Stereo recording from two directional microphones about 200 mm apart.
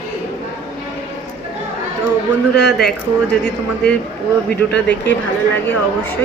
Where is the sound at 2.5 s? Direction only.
55° left (ahead or behind).